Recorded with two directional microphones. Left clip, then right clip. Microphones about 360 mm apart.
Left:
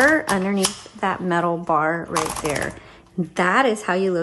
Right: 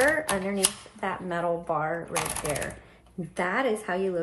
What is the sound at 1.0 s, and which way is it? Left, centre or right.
Speech, left.